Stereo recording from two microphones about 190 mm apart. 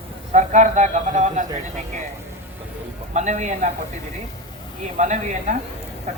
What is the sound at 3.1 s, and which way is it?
Speech, 40° right (ahead or behind).